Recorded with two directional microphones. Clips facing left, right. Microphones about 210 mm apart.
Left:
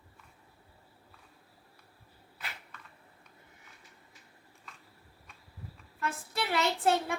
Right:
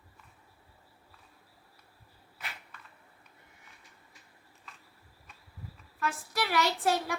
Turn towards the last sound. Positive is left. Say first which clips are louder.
# left 1 dB
turn(degrees=25)  # may be behind; listen again after turning